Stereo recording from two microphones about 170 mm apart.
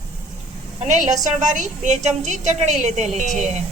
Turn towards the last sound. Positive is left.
turn(degrees=-45)  # may be behind; listen again after turning